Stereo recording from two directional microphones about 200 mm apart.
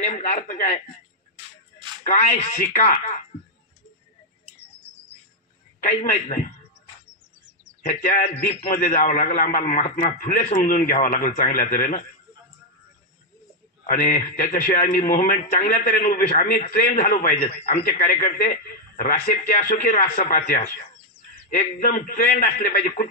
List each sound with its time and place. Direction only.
0.0 s a man's voice: 40° left (ahead or behind)
2.0 s a man's voice: 40° left (ahead or behind)
5.8 s a man's voice: 40° left (ahead or behind)
7.9 s a man's voice: 35° left (ahead or behind)
8.6 s a man's voice: 45° left (ahead or behind)
13.8 s a man's voice: 45° left (ahead or behind)